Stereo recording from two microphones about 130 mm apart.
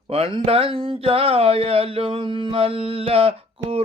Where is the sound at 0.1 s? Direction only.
50° right (ahead or behind).